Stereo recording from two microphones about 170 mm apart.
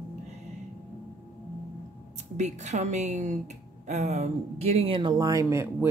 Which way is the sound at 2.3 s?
45° right (ahead or behind).